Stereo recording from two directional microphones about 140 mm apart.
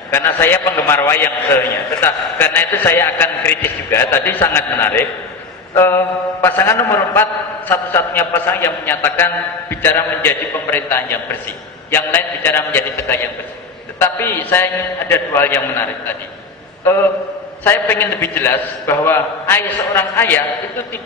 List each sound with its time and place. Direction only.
0.1 s a man's voice: 15° left (ahead or behind)
17.6 s a man's voice: 15° left (ahead or behind)